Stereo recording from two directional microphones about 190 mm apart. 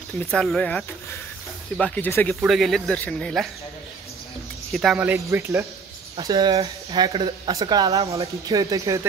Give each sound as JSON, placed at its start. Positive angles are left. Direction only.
{"t": 0.2, "sound": "speech", "side_deg": 5}
{"t": 2.4, "sound": "speech", "side_deg": 0}
{"t": 4.7, "sound": "speech", "side_deg": 0}